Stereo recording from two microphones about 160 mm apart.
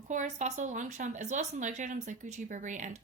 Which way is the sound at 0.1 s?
50° right (ahead or behind).